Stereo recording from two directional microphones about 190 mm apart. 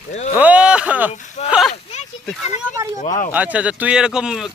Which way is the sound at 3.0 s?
40° left (ahead or behind).